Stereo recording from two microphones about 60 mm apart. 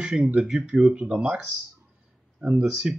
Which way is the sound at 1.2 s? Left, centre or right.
Centre.